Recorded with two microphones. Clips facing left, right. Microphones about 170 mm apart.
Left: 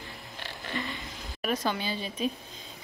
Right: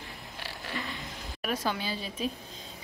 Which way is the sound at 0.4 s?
Centre (ahead or behind).